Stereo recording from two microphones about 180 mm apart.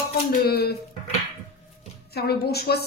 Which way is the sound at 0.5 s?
60° left (ahead or behind).